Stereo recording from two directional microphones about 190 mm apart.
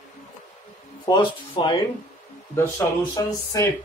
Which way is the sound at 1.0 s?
25° left (ahead or behind).